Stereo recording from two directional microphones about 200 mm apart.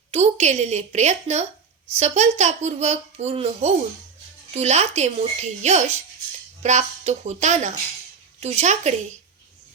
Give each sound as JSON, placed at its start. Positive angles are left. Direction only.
{"t": 0.1, "sound": "a child's voice", "side_deg": -35}